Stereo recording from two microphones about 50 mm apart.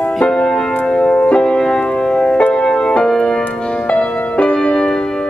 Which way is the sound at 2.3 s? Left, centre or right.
Left.